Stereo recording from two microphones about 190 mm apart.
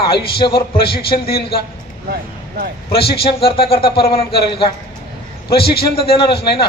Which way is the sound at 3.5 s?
30° left (ahead or behind).